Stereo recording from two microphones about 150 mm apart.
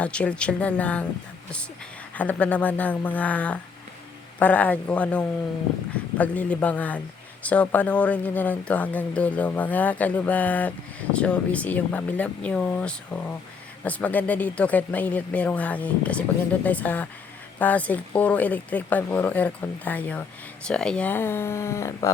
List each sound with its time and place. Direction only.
0.0 s speech: 5° left (ahead or behind)
2.1 s speech: 10° left (ahead or behind)